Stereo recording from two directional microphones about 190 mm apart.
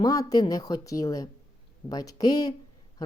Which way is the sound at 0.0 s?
20° left (ahead or behind).